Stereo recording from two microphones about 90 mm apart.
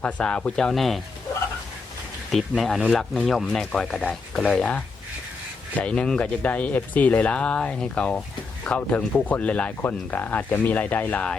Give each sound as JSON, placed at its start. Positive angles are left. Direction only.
{"t": 0.0, "sound": "speech", "side_deg": 10}
{"t": 2.3, "sound": "speech", "side_deg": 0}